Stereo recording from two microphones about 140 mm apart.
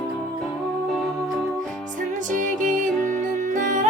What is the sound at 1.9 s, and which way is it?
Music, 65° right (ahead or behind).